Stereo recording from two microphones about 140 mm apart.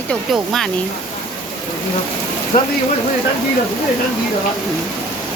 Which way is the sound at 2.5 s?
65° left (ahead or behind).